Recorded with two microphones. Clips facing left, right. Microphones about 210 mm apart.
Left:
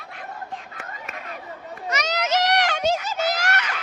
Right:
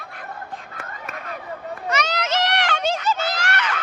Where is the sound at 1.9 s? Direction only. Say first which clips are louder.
Right 2 dB; 30° right (ahead or behind).